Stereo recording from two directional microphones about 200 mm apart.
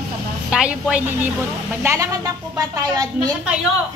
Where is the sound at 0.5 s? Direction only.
5° right (ahead or behind).